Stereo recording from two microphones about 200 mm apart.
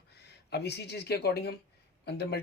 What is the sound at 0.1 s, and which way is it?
Speech, 55° left (ahead or behind).